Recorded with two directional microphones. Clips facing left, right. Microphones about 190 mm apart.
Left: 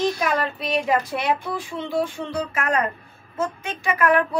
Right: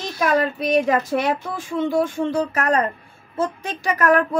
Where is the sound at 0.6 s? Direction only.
45° right (ahead or behind).